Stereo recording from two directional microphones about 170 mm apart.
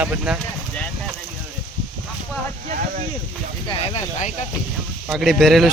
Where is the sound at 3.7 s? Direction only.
40° left (ahead or behind).